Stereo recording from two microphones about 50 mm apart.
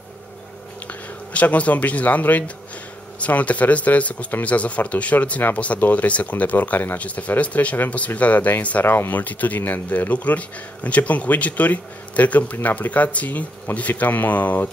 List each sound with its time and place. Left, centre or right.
1.3 s speech: left
8.8 s speech: left
9.2 s speech: left